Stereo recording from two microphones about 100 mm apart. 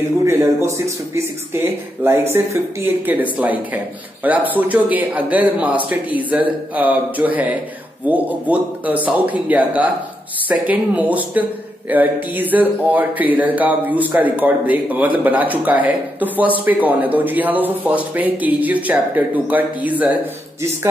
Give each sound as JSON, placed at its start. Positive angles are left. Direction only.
{"t": 0.2, "sound": "speech", "side_deg": -30}